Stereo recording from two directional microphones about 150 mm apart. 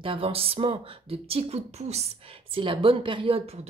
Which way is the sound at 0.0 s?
35° right (ahead or behind).